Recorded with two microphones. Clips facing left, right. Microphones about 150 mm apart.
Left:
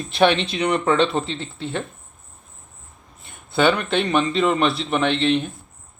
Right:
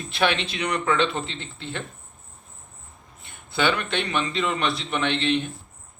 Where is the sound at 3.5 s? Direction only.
40° left (ahead or behind).